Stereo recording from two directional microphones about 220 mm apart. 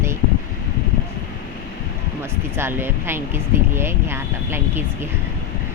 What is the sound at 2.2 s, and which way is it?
Speech, 10° right (ahead or behind).